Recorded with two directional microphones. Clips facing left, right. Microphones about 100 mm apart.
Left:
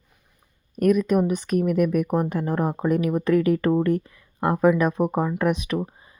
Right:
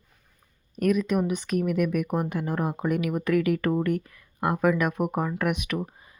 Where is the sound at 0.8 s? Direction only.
45° left (ahead or behind).